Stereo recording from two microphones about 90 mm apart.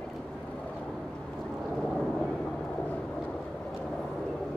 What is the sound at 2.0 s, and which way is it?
Vehicle, 5° left (ahead or behind).